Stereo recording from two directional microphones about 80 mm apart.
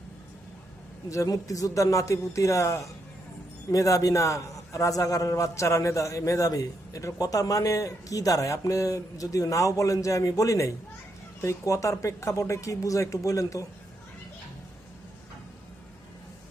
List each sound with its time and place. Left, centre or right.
1.1 s a man's voice: left